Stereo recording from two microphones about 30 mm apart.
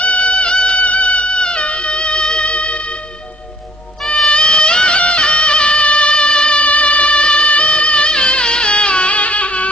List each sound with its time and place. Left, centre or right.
0.0 s music: left
4.3 s a sound: left
4.9 s music: left
6.6 s music: left